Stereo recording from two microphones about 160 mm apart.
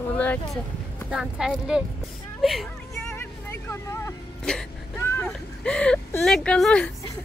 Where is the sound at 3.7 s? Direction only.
15° left (ahead or behind).